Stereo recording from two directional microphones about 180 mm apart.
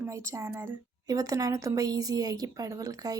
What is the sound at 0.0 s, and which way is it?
Speech, 15° right (ahead or behind).